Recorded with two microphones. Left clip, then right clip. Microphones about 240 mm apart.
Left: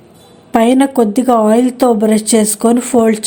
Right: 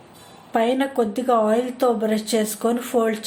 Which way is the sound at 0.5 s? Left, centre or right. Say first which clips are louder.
Left 9 dB; left.